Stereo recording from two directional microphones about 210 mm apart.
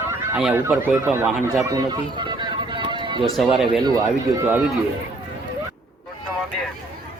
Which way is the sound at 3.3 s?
Centre (ahead or behind).